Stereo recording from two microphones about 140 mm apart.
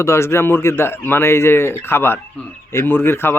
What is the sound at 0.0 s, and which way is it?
Speech, 20° left (ahead or behind).